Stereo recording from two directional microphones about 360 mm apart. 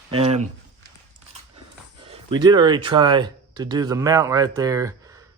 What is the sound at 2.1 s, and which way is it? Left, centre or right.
Speech, centre.